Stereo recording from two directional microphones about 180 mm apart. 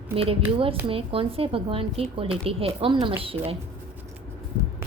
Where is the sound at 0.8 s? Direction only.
30° right (ahead or behind).